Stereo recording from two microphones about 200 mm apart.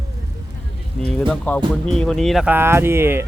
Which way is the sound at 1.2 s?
10° left (ahead or behind).